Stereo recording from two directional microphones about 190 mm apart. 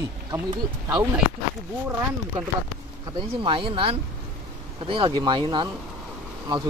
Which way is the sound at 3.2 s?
30° right (ahead or behind).